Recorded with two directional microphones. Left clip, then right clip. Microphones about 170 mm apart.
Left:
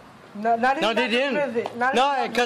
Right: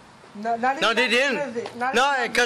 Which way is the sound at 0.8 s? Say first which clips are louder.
Right 2 dB; centre (ahead or behind).